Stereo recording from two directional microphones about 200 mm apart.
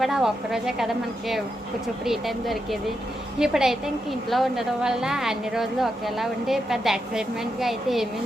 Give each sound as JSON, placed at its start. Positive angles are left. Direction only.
{"t": 0.0, "sound": "a woman's voice", "side_deg": 0}
{"t": 2.0, "sound": "a woman's voice", "side_deg": 0}